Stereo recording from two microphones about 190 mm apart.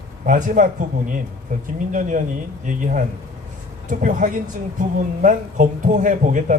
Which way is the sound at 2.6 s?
40° right (ahead or behind).